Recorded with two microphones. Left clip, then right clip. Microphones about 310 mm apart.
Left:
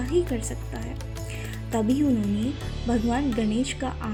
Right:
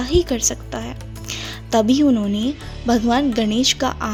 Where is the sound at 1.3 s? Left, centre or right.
Right.